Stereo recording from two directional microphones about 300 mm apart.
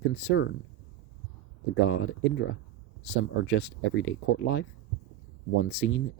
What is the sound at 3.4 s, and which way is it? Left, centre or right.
Speech, left.